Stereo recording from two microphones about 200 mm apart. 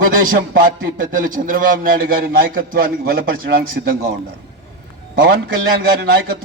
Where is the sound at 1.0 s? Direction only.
40° right (ahead or behind).